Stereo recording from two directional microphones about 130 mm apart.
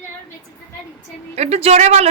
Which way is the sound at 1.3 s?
55° right (ahead or behind).